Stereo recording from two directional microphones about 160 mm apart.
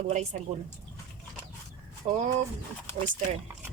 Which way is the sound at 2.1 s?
40° right (ahead or behind).